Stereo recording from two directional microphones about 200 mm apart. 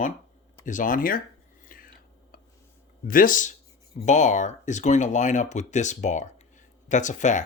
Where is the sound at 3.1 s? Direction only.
40° left (ahead or behind).